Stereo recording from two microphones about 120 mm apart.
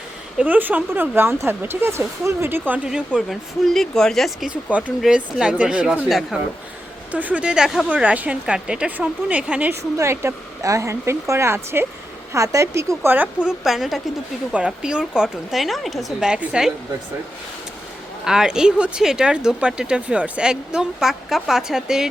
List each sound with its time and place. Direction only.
0.3 s speech: 15° right (ahead or behind)
7.1 s speech: 10° right (ahead or behind)
10.0 s speech: 25° right (ahead or behind); by 16.7 s 5° right (ahead or behind)
18.3 s speech: 5° right (ahead or behind)